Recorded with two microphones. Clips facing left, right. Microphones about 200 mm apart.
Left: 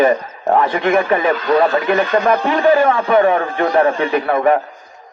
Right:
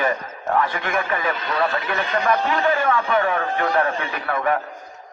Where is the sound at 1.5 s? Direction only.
55° left (ahead or behind).